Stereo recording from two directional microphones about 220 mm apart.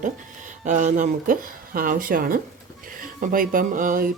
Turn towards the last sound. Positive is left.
turn(degrees=-40)  # may be behind; listen again after turning